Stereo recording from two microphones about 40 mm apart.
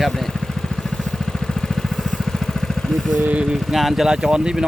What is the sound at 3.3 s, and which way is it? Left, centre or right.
Speech, right.